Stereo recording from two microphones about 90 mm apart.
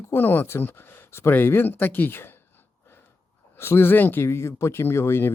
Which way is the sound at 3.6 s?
25° left (ahead or behind).